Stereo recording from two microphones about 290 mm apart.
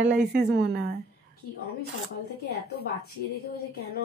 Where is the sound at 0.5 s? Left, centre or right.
Right.